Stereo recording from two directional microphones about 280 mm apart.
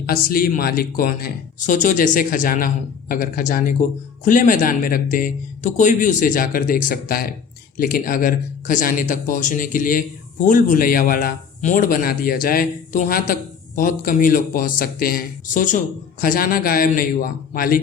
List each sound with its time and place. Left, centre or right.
0.0 s a man's voice: left